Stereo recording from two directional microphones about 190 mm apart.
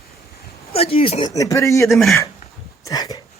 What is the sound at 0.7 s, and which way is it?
Speech, 30° left (ahead or behind).